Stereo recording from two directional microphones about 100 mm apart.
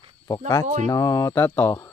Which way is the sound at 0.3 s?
35° left (ahead or behind).